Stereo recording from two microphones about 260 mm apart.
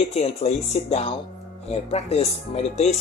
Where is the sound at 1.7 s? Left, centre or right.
Left.